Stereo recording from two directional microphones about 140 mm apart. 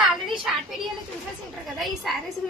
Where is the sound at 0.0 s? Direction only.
Centre (ahead or behind).